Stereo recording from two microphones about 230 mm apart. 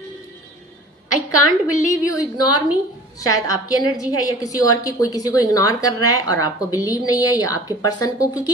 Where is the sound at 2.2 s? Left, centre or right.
Centre.